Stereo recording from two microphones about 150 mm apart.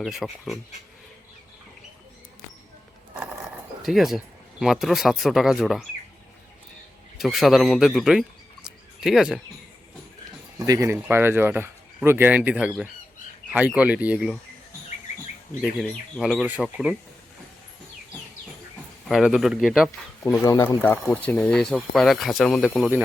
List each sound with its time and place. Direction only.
0.0 s speech: centre (ahead or behind)
3.8 s speech: centre (ahead or behind)
7.2 s speech: centre (ahead or behind)
8.6 s a sound: centre (ahead or behind)
10.6 s speech: 20° right (ahead or behind); by 14.3 s 5° right (ahead or behind)
15.8 s speech: centre (ahead or behind)
19.0 s speech: centre (ahead or behind)
20.4 s speech: 20° left (ahead or behind); by 22.9 s centre (ahead or behind)